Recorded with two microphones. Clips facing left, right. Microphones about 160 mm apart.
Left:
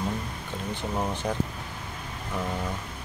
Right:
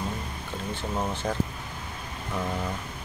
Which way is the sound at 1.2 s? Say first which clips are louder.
Even; 10° left (ahead or behind).